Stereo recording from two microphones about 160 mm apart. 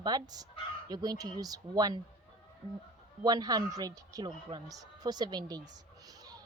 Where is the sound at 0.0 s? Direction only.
25° right (ahead or behind).